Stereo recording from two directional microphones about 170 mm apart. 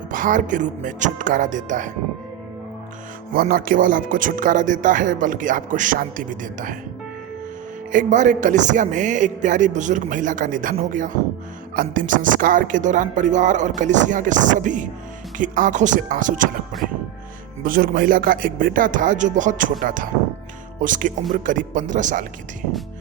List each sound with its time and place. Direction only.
0.1 s speech: 50° right (ahead or behind)
3.4 s speech: 55° right (ahead or behind)
7.9 s speech: 45° right (ahead or behind)
17.6 s speech: 55° right (ahead or behind)